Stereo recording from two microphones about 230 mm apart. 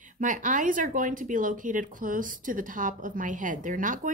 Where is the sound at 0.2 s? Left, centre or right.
Right.